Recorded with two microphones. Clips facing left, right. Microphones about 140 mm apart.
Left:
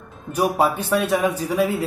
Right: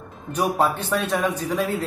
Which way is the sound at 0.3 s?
10° left (ahead or behind).